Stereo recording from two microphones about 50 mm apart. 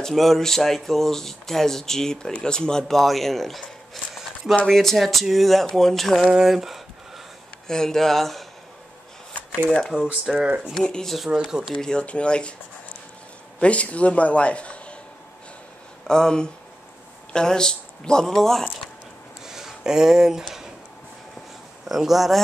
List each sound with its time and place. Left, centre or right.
0.0 s speech: centre
2.9 s speech: centre
3.9 s a sound: centre
4.6 s speech: centre
6.2 s speech: centre
7.6 s speech: centre
9.7 s speech: centre
13.6 s a man's voice: left
16.1 s speech: centre
19.4 s a sound: centre
21.8 s speech: centre